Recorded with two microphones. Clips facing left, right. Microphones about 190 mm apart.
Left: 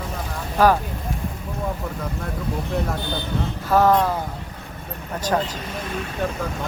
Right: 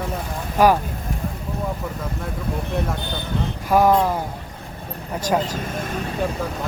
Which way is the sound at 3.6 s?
10° right (ahead or behind).